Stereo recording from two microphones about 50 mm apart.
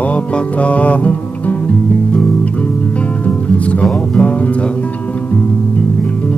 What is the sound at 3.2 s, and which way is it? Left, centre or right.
Music, left.